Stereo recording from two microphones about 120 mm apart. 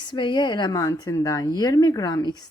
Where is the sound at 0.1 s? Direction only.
40° left (ahead or behind).